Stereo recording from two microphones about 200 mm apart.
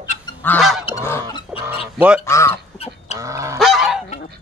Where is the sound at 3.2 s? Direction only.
15° right (ahead or behind).